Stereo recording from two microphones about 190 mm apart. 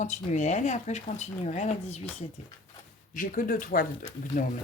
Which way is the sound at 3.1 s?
45° left (ahead or behind).